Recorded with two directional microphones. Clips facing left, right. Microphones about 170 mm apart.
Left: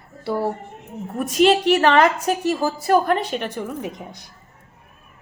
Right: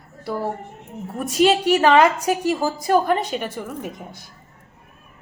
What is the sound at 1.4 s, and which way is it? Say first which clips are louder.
A woman's voice: left 1 dB; 10° right (ahead or behind).